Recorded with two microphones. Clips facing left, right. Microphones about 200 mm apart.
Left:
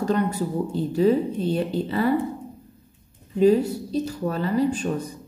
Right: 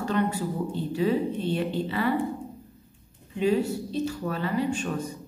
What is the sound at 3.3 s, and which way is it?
A woman's voice, 40° left (ahead or behind).